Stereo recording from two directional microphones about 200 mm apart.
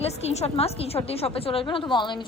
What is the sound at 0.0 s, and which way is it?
A woman's voice, 30° left (ahead or behind).